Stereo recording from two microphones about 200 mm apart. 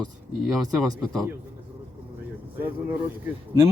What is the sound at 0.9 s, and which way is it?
Speech, 5° right (ahead or behind).